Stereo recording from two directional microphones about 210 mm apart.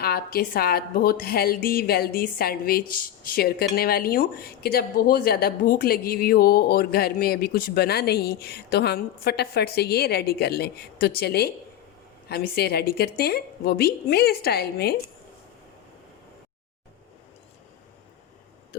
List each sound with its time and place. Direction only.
0.0 s speech: 45° left (ahead or behind)